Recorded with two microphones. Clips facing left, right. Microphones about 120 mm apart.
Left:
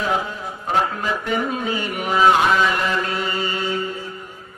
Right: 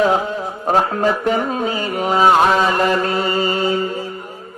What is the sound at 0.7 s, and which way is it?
Speech, 40° right (ahead or behind).